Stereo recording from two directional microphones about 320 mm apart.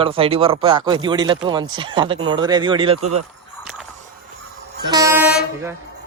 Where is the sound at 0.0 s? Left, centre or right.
Centre.